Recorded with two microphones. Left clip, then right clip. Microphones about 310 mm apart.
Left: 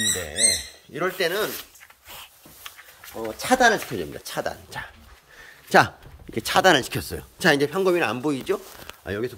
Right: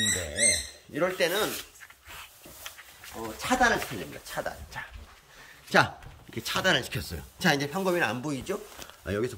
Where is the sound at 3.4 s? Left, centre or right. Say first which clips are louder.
Left 6 dB; centre.